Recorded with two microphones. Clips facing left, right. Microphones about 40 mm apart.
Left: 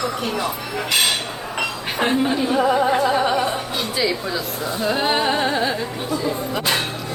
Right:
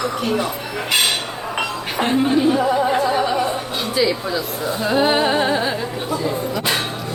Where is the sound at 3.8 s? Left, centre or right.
Centre.